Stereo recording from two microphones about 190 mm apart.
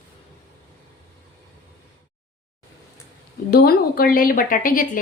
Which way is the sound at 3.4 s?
55° left (ahead or behind).